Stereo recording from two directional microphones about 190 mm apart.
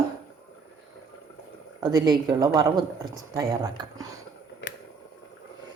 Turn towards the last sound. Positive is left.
turn(degrees=-20)  # may be behind; listen again after turning